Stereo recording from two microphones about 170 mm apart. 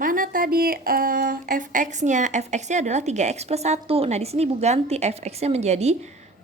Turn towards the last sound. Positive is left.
turn(degrees=-40)  # may be behind; listen again after turning